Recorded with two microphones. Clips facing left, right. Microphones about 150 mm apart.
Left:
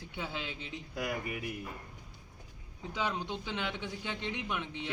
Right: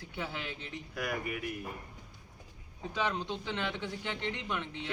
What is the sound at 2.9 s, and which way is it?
A man's voice, 10° left (ahead or behind).